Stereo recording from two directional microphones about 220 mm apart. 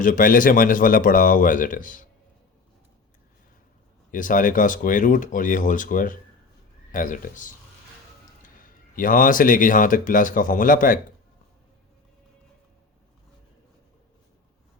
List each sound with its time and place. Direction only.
0.0 s speech: 40° left (ahead or behind)
4.1 s speech: 35° left (ahead or behind)